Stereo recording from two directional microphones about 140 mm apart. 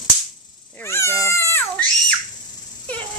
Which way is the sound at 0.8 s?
20° left (ahead or behind).